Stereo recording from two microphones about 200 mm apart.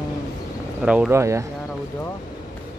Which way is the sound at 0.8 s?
5° right (ahead or behind).